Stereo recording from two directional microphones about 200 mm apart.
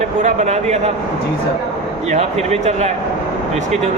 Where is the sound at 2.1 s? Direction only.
30° right (ahead or behind).